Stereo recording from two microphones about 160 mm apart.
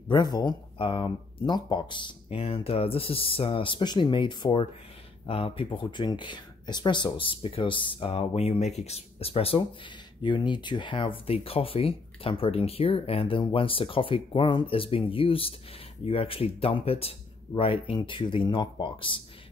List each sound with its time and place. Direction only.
0.1 s speech: 25° left (ahead or behind)